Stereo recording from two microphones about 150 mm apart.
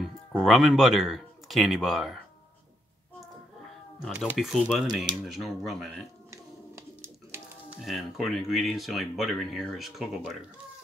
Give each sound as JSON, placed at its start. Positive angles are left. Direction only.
{"t": 0.4, "sound": "speech", "side_deg": 0}
{"t": 4.1, "sound": "speech", "side_deg": -5}
{"t": 6.3, "sound": "a sound", "side_deg": -15}
{"t": 7.8, "sound": "speech", "side_deg": 0}